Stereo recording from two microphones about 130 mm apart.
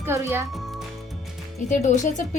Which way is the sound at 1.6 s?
70° left (ahead or behind).